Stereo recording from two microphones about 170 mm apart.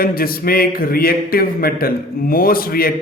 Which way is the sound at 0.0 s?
60° left (ahead or behind).